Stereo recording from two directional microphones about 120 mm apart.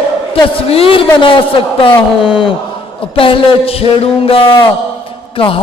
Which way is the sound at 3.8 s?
50° left (ahead or behind).